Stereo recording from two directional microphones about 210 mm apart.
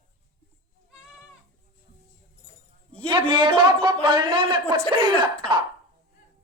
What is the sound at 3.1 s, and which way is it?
Speech, 25° right (ahead or behind).